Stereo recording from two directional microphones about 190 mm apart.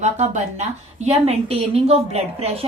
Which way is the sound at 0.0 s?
40° right (ahead or behind).